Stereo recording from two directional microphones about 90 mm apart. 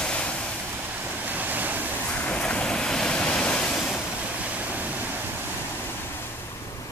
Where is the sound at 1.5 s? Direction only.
20° right (ahead or behind).